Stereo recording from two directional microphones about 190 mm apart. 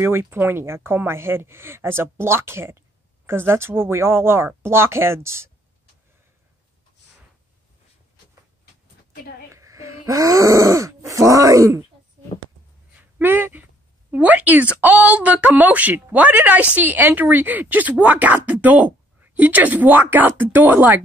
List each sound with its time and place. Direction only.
0.0 s speech: 15° right (ahead or behind)
9.5 s speech: 15° right (ahead or behind)
13.2 s speech: 10° right (ahead or behind)